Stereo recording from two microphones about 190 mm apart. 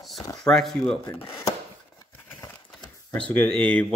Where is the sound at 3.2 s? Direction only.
5° left (ahead or behind).